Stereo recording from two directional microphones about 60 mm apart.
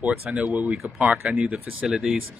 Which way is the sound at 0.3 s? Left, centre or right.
Right.